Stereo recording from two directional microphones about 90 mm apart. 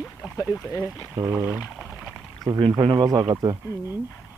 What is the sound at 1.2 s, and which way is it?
Speech, 30° right (ahead or behind).